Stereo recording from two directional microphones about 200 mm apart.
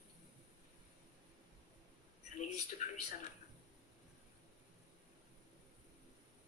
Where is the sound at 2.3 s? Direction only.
40° left (ahead or behind).